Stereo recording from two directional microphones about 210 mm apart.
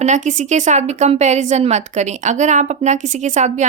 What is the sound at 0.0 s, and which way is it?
A woman's voice, 35° right (ahead or behind).